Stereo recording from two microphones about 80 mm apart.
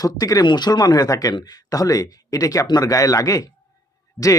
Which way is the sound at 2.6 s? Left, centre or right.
Left.